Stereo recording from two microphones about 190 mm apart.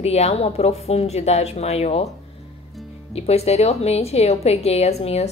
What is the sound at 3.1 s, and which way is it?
Speech, 35° left (ahead or behind).